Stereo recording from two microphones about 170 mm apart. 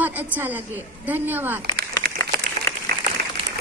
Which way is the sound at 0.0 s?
10° right (ahead or behind).